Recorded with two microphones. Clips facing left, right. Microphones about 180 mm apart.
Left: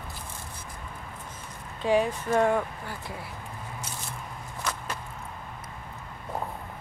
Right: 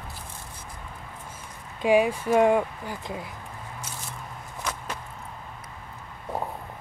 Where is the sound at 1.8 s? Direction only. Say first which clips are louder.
Right 4 dB; 10° right (ahead or behind).